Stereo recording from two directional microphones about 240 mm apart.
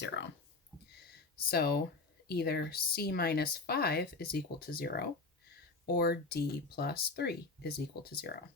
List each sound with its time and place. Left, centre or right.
0.0 s speech: left
1.4 s speech: left